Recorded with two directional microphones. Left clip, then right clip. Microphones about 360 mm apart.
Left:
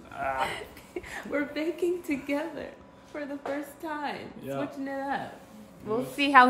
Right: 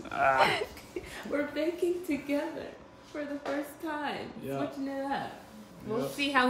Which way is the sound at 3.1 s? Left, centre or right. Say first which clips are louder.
Left 1 dB; centre.